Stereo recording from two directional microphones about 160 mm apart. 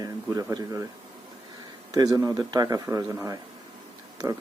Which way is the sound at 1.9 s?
25° right (ahead or behind).